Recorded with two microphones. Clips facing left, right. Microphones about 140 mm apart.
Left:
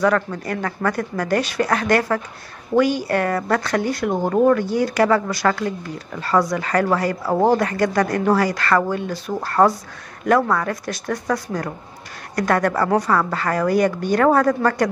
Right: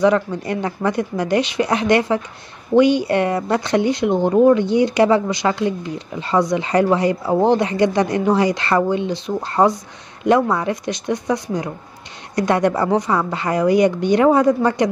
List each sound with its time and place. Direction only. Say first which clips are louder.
0.0 s a woman's voice: right 3 dB; 20° right (ahead or behind)